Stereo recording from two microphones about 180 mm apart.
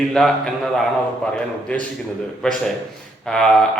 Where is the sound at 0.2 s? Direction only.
5° left (ahead or behind).